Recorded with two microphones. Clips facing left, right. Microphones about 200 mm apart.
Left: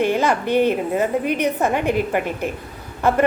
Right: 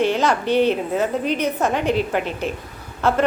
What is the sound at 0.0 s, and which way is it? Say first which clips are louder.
A woman's voice: even; 10° left (ahead or behind).